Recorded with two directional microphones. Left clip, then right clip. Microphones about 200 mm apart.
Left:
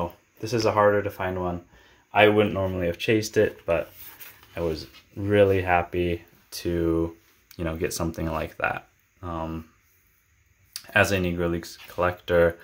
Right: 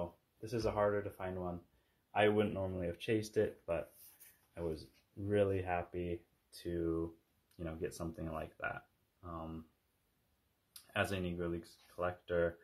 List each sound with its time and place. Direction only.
0.4 s speech: 10° left (ahead or behind)
10.7 s speech: 15° left (ahead or behind)